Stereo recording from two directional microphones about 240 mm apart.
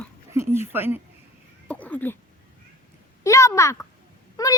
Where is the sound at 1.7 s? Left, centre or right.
Centre.